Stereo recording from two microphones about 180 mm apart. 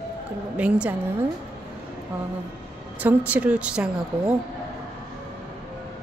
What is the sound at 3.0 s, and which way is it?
Speech, 10° right (ahead or behind).